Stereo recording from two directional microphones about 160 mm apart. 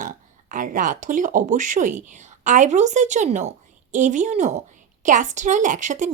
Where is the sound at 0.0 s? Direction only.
55° right (ahead or behind).